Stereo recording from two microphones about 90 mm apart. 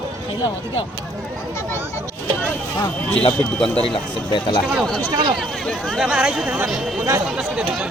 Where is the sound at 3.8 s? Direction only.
75° left (ahead or behind).